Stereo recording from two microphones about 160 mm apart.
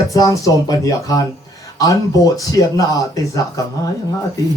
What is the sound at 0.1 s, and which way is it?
Speech, 20° left (ahead or behind).